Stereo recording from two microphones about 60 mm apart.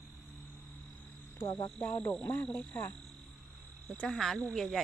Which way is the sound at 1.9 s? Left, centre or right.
Left.